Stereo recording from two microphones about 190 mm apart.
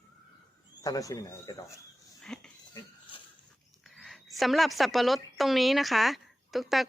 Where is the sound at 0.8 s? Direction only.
20° left (ahead or behind).